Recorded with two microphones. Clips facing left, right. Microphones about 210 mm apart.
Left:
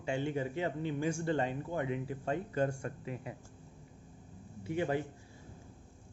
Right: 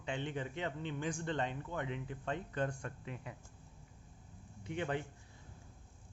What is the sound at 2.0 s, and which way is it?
Speech, 10° left (ahead or behind).